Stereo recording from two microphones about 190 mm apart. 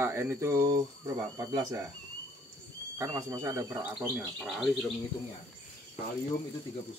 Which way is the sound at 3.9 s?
Centre (ahead or behind).